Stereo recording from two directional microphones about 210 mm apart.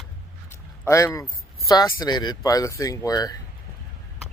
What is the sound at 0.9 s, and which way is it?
Speech, 15° left (ahead or behind).